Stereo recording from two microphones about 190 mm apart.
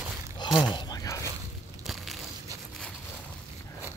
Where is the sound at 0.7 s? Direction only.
20° left (ahead or behind).